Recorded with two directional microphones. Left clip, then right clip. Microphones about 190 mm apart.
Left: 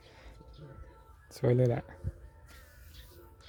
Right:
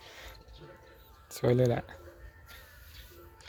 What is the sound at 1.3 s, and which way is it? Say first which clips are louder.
Speech: right 2 dB; 20° left (ahead or behind).